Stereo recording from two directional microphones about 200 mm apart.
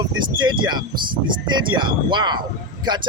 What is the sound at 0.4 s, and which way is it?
Speech, 20° right (ahead or behind).